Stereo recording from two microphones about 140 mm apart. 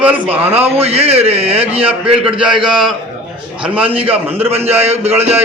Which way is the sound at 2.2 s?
5° right (ahead or behind).